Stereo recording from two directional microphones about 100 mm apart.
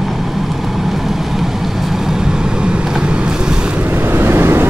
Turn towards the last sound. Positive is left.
turn(degrees=-25)  # may be behind; listen again after turning